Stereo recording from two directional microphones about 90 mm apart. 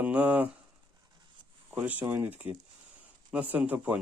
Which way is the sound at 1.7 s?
20° right (ahead or behind).